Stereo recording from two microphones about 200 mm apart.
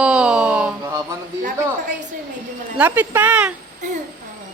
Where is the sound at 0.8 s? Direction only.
15° right (ahead or behind).